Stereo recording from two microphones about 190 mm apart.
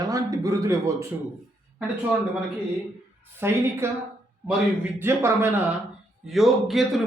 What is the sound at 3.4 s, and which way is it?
Speech, 10° right (ahead or behind).